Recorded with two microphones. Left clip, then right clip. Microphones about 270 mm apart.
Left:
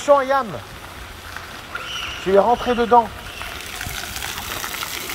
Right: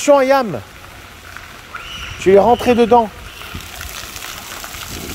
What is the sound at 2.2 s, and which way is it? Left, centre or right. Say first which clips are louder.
Speech: right 6 dB; right.